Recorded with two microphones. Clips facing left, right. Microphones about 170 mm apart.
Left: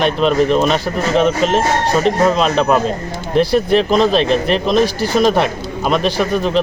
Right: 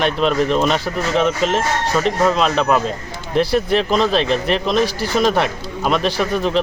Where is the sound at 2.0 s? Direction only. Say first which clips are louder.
Left 2 dB; 15° left (ahead or behind).